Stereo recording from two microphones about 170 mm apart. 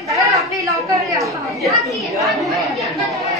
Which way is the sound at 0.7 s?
20° right (ahead or behind).